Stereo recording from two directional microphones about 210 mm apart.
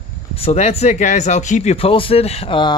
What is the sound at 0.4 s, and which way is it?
Speech, 30° left (ahead or behind).